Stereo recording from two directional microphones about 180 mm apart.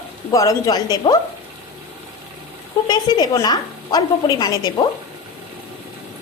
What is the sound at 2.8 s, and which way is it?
A woman's voice, 20° left (ahead or behind).